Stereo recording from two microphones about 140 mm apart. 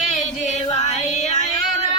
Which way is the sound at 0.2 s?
55° left (ahead or behind).